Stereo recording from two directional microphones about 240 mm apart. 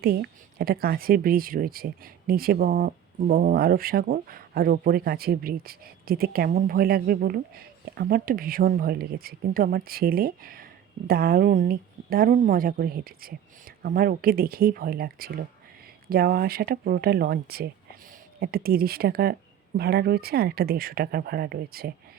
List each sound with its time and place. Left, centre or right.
0.0 s speech: right